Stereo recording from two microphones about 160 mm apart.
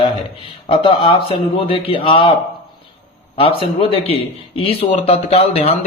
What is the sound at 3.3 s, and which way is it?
A man's voice, 35° left (ahead or behind).